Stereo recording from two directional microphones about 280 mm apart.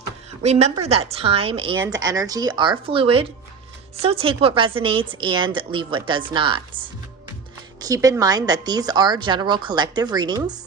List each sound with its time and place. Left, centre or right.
0.4 s a woman's voice: right
7.8 s a woman's voice: centre